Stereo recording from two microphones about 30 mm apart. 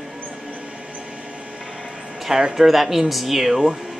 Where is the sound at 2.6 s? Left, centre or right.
Centre.